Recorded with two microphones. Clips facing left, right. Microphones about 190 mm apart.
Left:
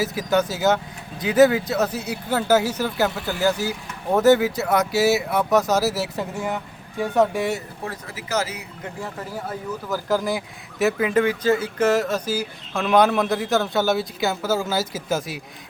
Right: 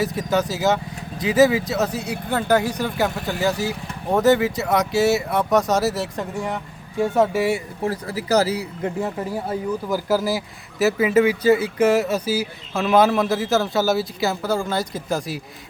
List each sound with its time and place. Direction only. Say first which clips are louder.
0.0 s speech: even; centre (ahead or behind)
7.9 s speech: right 9 dB; 35° right (ahead or behind)
9.5 s speech: right 4 dB; 10° right (ahead or behind)